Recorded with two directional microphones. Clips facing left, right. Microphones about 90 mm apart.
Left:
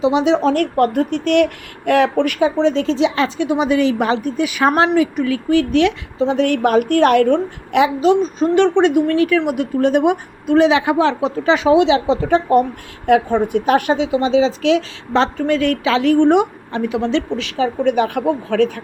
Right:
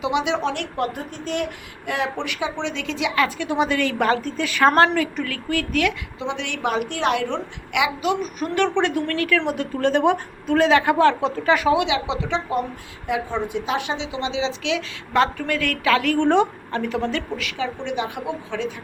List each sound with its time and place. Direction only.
0.0 s a woman's voice: 35° left (ahead or behind)
6.1 s a child's voice: 40° left (ahead or behind)
7.8 s a woman's voice: 35° left (ahead or behind)
17.6 s a child's voice: 45° left (ahead or behind)